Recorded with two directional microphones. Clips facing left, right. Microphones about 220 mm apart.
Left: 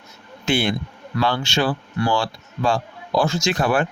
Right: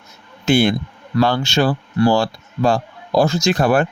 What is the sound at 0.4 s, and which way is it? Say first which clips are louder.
Speech: right 6 dB; 40° right (ahead or behind).